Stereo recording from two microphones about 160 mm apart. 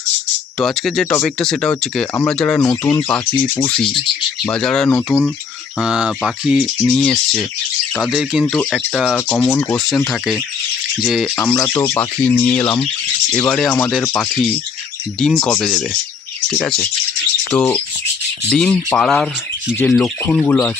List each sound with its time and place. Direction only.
0.6 s speech: centre (ahead or behind)
3.8 s speech: 30° left (ahead or behind)
4.4 s speech: 5° left (ahead or behind)
9.1 s speech: 10° left (ahead or behind)
9.7 s speech: centre (ahead or behind)
11.3 s speech: 15° left (ahead or behind)